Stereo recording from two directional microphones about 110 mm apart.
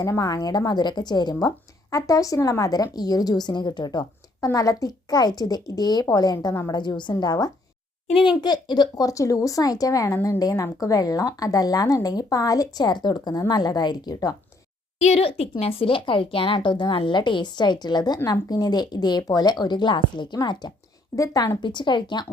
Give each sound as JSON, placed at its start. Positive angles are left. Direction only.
{"t": 0.0, "sound": "a woman's voice", "side_deg": 35}
{"t": 6.7, "sound": "a woman's voice", "side_deg": 40}
{"t": 15.0, "sound": "a woman's voice", "side_deg": 70}